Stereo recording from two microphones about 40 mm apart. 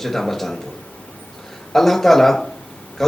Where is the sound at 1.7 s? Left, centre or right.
Centre.